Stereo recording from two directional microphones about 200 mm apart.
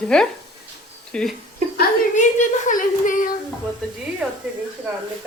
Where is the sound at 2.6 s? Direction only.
40° left (ahead or behind).